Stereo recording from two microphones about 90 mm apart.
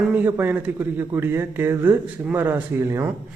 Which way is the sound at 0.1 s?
20° right (ahead or behind).